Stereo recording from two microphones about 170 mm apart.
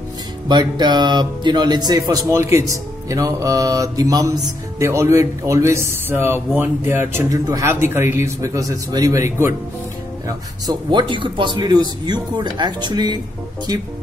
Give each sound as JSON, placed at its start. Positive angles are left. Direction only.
{"t": 0.5, "sound": "speech", "side_deg": -25}